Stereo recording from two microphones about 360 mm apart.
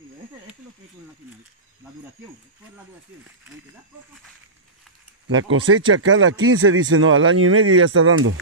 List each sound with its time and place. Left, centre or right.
5.3 s speech: right